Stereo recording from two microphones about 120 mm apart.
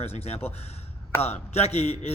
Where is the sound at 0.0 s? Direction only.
60° left (ahead or behind).